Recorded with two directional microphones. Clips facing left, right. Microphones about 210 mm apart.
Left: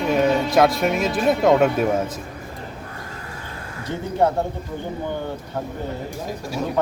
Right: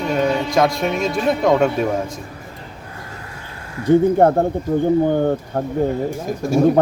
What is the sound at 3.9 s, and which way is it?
Speech, 50° right (ahead or behind).